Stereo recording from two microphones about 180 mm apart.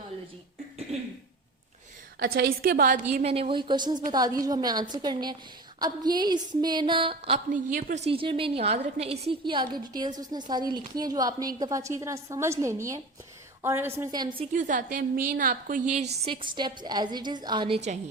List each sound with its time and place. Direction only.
2.1 s a woman's voice: 65° right (ahead or behind); by 7.4 s 30° right (ahead or behind)
7.5 s a woman's voice: 45° right (ahead or behind); by 14.4 s 25° right (ahead or behind)
14.5 s a woman's voice: 45° right (ahead or behind)
16.2 s a woman's voice: 30° right (ahead or behind)